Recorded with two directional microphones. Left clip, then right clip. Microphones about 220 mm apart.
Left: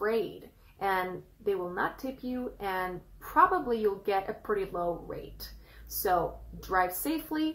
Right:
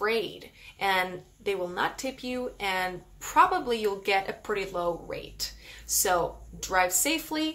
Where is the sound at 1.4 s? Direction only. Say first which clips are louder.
Right 2 dB; 20° right (ahead or behind).